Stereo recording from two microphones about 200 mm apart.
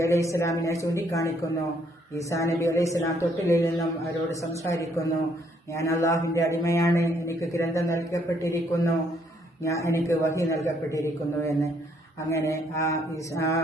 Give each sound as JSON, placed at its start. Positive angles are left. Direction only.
{"t": 0.0, "sound": "a man's voice", "side_deg": 15}